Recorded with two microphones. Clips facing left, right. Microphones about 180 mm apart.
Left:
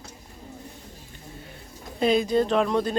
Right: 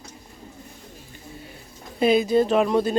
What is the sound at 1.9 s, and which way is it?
Speech, 5° right (ahead or behind).